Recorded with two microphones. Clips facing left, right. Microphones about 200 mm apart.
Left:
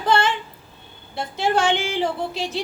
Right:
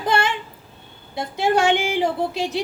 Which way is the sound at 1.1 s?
15° right (ahead or behind).